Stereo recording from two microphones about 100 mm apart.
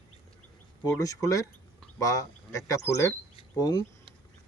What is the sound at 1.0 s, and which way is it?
Speech, 35° left (ahead or behind).